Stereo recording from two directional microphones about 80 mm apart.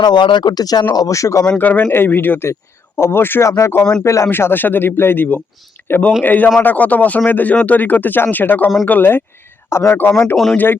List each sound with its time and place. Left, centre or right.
0.0 s speech: left
0.9 s speech: left
1.5 s speech: left
4.3 s speech: left
10.3 s speech: centre